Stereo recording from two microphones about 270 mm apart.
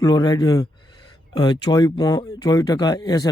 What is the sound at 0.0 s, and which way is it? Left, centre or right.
Speech, centre.